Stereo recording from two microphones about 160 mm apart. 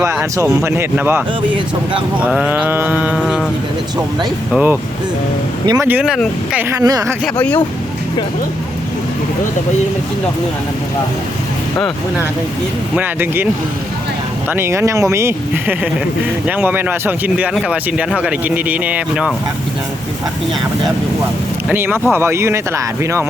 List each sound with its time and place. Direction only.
0.0 s speech: 15° right (ahead or behind)
1.4 s speech: 30° right (ahead or behind)
2.1 s speech: 5° right (ahead or behind)
4.5 s speech: 10° right (ahead or behind)
6.0 s speech: 5° right (ahead or behind); by 7.2 s 20° right (ahead or behind)
7.3 s speech: 10° left (ahead or behind)
13.0 s speech: 15° right (ahead or behind)
14.5 s speech: 15° right (ahead or behind)
21.7 s speech: 15° right (ahead or behind)